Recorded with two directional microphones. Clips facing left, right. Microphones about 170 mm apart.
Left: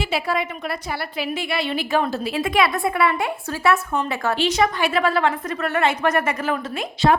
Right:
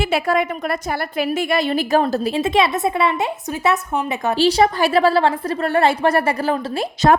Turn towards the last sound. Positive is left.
turn(degrees=-40)  # may be behind; listen again after turning